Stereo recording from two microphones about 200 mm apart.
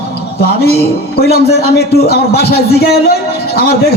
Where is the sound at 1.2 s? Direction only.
50° left (ahead or behind).